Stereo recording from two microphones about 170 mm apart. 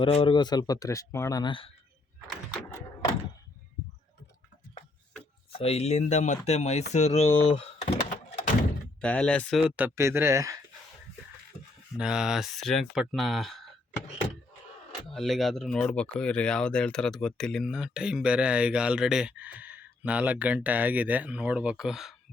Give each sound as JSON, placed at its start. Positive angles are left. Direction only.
{"t": 0.0, "sound": "speech", "side_deg": 30}
{"t": 5.5, "sound": "speech", "side_deg": 35}
{"t": 9.0, "sound": "speech", "side_deg": 5}
{"t": 11.9, "sound": "speech", "side_deg": -5}
{"t": 15.0, "sound": "speech", "side_deg": 0}